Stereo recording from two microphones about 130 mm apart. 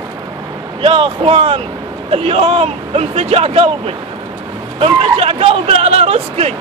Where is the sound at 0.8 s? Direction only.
45° right (ahead or behind).